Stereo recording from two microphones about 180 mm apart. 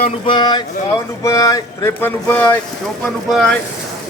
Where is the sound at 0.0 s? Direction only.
25° left (ahead or behind); by 3.6 s centre (ahead or behind).